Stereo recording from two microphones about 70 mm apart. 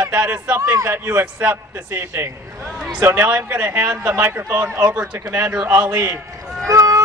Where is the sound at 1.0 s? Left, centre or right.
Right.